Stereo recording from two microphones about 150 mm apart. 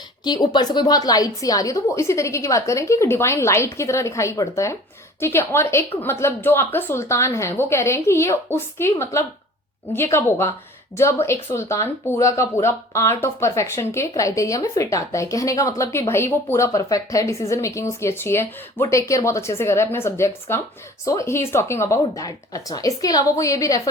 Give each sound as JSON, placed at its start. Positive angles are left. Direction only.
{"t": 0.3, "sound": "a woman's voice", "side_deg": 30}